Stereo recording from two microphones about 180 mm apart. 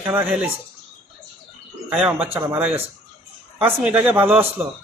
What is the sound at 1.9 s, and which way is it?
Speech, 5° right (ahead or behind).